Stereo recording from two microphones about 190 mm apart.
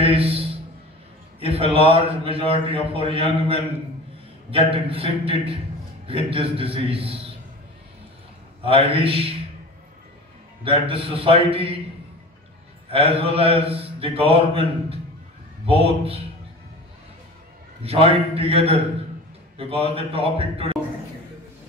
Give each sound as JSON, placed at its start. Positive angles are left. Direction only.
{"t": 0.0, "sound": "a man's voice", "side_deg": -30}
{"t": 8.6, "sound": "a man's voice", "side_deg": -30}
{"t": 10.6, "sound": "a man's voice", "side_deg": -30}
{"t": 12.8, "sound": "a man's voice", "side_deg": -30}
{"t": 17.8, "sound": "a man's voice", "side_deg": -30}